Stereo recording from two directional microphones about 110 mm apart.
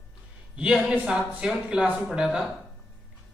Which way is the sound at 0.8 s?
5° right (ahead or behind).